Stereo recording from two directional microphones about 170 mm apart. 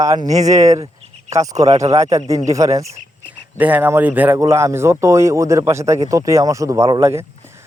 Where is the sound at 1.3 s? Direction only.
20° right (ahead or behind).